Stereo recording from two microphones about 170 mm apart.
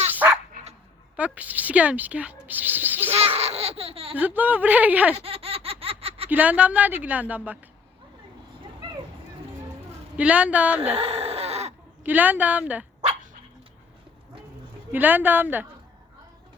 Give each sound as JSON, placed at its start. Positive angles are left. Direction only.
{"t": 0.1, "sound": "dog", "side_deg": -10}
{"t": 1.1, "sound": "speech", "side_deg": -10}
{"t": 3.1, "sound": "speech", "side_deg": -35}
{"t": 4.1, "sound": "a woman's voice", "side_deg": -10}
{"t": 5.1, "sound": "laughter", "side_deg": -35}
{"t": 6.2, "sound": "a woman's voice", "side_deg": -10}
{"t": 10.2, "sound": "a woman's voice", "side_deg": -10}
{"t": 10.9, "sound": "a sound", "side_deg": -35}
{"t": 12.0, "sound": "a woman's voice", "side_deg": -10}
{"t": 14.9, "sound": "a woman's voice", "side_deg": -10}